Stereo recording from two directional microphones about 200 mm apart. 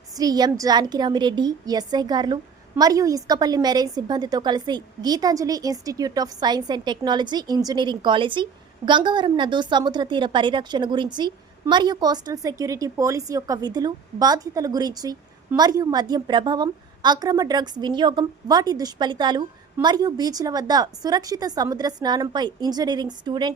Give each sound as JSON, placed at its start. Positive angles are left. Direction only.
{"t": 0.2, "sound": "a woman's voice", "side_deg": -20}